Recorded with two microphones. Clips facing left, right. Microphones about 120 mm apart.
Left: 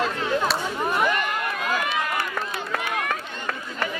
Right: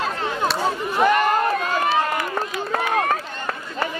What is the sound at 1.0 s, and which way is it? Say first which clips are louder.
Run: right 7 dB; 40° right (ahead or behind).